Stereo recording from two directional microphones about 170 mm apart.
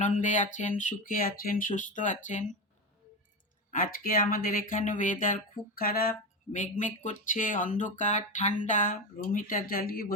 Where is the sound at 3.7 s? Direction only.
55° left (ahead or behind).